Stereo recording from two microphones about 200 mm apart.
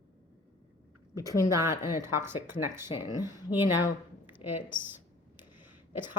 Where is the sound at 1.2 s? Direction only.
15° left (ahead or behind).